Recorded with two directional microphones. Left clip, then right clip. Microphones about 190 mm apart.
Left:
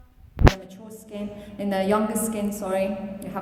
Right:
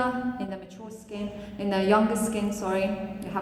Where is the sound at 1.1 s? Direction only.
55° left (ahead or behind).